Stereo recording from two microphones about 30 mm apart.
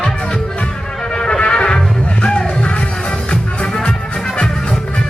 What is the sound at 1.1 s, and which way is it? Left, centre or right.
Music, left.